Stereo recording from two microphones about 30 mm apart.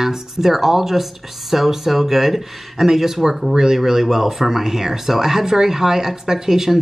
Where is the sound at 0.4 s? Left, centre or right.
Centre.